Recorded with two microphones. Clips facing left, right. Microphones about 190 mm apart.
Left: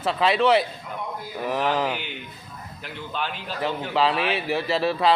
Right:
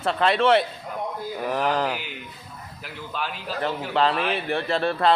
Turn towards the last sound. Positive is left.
turn(degrees=5)  # may be behind; listen again after turning